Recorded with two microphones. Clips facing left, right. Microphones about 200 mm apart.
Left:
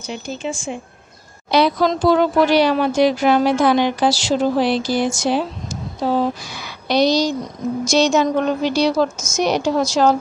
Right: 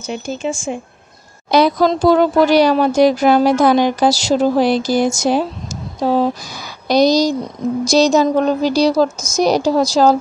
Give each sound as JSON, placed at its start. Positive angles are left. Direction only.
{"t": 0.0, "sound": "a woman's voice", "side_deg": -45}
{"t": 6.9, "sound": "speech", "side_deg": -40}